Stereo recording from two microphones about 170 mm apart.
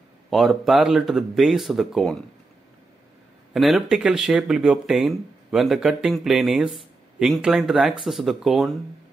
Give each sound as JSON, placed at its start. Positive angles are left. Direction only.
{"t": 0.3, "sound": "speech", "side_deg": 0}
{"t": 3.5, "sound": "speech", "side_deg": 0}